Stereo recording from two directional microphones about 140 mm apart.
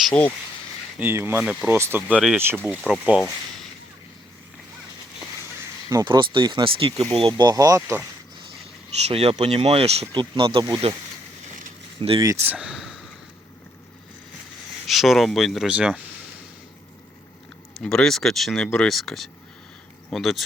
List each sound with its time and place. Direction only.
0.0 s speech: 10° left (ahead or behind)
0.9 s speech: 15° right (ahead or behind)
6.1 s speech: 35° right (ahead or behind)
9.0 s speech: 50° right (ahead or behind)
11.9 s speech: 40° right (ahead or behind)
12.2 s speech: 20° right (ahead or behind); by 13.0 s centre (ahead or behind)
14.8 s speech: centre (ahead or behind)
17.8 s speech: 5° left (ahead or behind)